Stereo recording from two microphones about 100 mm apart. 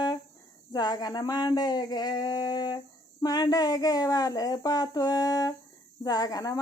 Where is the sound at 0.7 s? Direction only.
45° left (ahead or behind).